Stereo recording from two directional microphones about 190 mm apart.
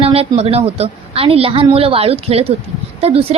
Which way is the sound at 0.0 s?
30° right (ahead or behind).